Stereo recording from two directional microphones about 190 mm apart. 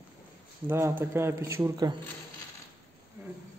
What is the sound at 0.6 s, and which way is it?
Speech, 10° right (ahead or behind).